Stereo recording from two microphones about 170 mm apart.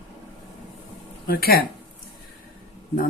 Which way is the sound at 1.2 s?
65° left (ahead or behind).